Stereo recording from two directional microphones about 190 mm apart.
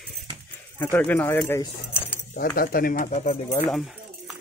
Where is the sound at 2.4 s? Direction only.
50° left (ahead or behind).